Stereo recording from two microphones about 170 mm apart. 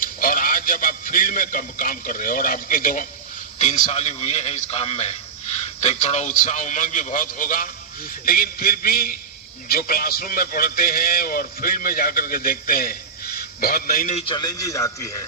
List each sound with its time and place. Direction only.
0.0 s radio: 55° left (ahead or behind)
3.6 s a man's voice: 40° left (ahead or behind); by 14.1 s 60° left (ahead or behind)
14.1 s a man's voice: 40° left (ahead or behind)
14.3 s a man's voice: 20° left (ahead or behind)